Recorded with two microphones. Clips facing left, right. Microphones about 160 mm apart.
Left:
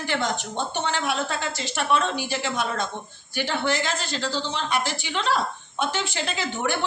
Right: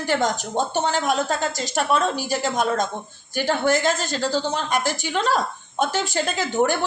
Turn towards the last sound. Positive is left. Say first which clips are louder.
# right 5 dB
turn(degrees=-45)  # may be behind; listen again after turning